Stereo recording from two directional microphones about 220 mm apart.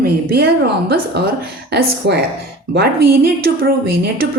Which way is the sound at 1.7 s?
45° right (ahead or behind).